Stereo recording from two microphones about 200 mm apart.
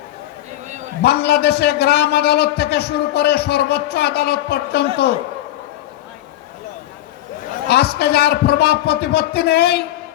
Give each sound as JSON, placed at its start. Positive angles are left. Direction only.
{"t": 1.0, "sound": "a man's voice", "side_deg": 55}
{"t": 7.7, "sound": "a man's voice", "side_deg": 55}